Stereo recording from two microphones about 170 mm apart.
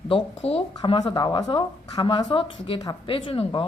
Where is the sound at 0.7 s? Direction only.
25° left (ahead or behind).